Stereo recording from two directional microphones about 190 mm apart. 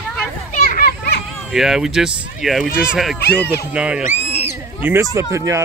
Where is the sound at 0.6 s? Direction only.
50° left (ahead or behind).